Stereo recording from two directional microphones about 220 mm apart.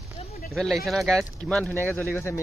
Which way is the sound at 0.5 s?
Centre (ahead or behind).